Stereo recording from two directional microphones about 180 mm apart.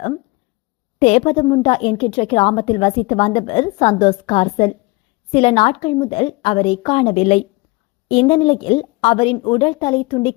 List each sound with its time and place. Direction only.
0.9 s a woman's voice: 35° left (ahead or behind)